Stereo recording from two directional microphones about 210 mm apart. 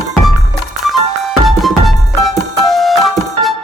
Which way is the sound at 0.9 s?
Centre (ahead or behind).